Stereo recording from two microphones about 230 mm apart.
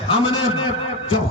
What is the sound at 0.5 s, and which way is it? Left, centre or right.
Speech, left.